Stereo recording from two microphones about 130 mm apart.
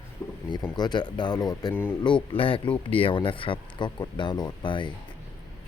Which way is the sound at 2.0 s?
40° left (ahead or behind).